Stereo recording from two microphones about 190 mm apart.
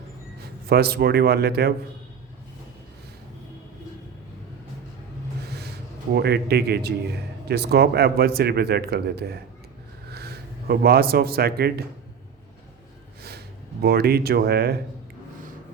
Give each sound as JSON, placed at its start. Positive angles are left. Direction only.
{"t": 0.7, "sound": "speech", "side_deg": -55}
{"t": 5.5, "sound": "a sound", "side_deg": -60}
{"t": 6.1, "sound": "speech", "side_deg": -60}
{"t": 13.8, "sound": "speech", "side_deg": -55}